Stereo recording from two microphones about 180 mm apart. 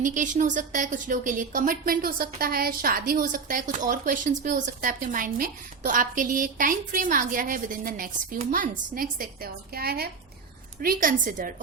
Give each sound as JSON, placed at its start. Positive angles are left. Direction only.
{"t": 0.0, "sound": "a woman's voice", "side_deg": -45}